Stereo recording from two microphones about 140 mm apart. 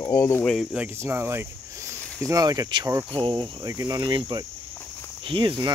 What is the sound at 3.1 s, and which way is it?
Speech, 35° right (ahead or behind).